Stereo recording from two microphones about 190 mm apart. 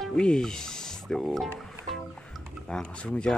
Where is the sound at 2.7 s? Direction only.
5° left (ahead or behind).